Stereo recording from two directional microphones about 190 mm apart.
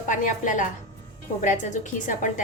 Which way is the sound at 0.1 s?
40° left (ahead or behind).